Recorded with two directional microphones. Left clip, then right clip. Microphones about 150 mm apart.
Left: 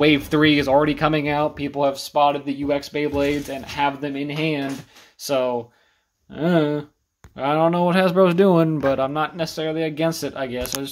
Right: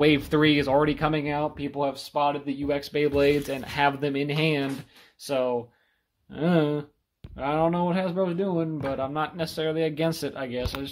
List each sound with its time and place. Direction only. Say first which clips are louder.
0.0 s speech: left 4 dB; centre (ahead or behind)
2.9 s speech: even; 20° right (ahead or behind)
5.2 s speech: left 5 dB; 5° left (ahead or behind)
7.3 s speech: left 6 dB; 15° left (ahead or behind)
7.8 s speech: left 9 dB; 30° left (ahead or behind)
8.1 s speech: left 11 dB; 55° left (ahead or behind)
8.8 s speech: left 9 dB; 20° left (ahead or behind)
9.1 s speech: left 5 dB; 5° left (ahead or behind)